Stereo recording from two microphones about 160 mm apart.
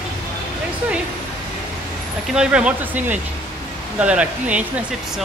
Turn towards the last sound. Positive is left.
turn(degrees=-5)  # may be behind; listen again after turning